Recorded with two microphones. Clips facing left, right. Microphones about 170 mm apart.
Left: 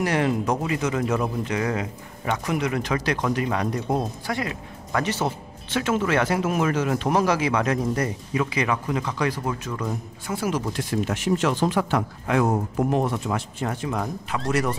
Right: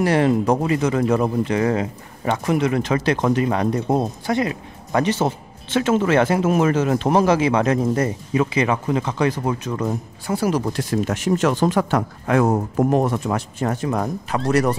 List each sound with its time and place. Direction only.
0.0 s a man's voice: 30° right (ahead or behind)
9.8 s speech: 35° right (ahead or behind)